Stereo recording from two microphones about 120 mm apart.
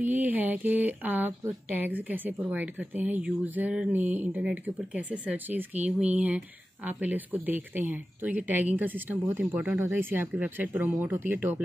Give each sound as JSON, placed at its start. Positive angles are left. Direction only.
{"t": 0.0, "sound": "speech", "side_deg": -15}